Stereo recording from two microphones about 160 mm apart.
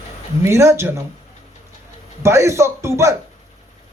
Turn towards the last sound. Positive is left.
turn(degrees=-15)  # may be behind; listen again after turning